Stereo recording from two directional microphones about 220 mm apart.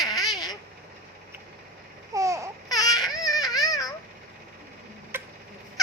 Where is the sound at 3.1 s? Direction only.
15° left (ahead or behind).